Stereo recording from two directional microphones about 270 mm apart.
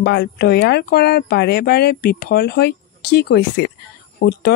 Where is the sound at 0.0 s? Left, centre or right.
Left.